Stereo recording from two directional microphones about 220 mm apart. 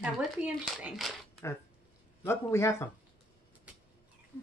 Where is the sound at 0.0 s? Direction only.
5° right (ahead or behind).